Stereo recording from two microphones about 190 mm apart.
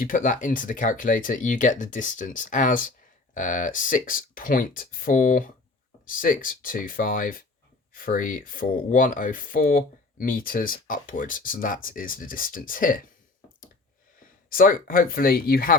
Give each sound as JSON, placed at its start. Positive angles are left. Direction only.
{"t": 0.0, "sound": "speech", "side_deg": 45}
{"t": 14.5, "sound": "speech", "side_deg": 50}